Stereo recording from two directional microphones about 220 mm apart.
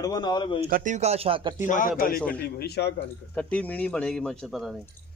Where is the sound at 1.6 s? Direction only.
35° left (ahead or behind).